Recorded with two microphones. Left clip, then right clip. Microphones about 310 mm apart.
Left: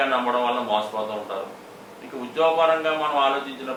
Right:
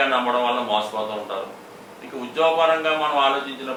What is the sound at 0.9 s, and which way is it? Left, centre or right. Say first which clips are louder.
Speech: right 1 dB; left.